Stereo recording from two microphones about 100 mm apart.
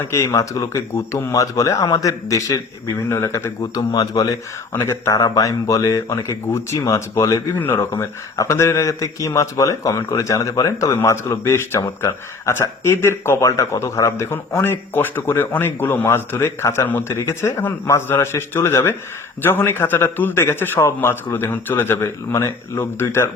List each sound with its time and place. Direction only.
0.0 s speech: 25° left (ahead or behind)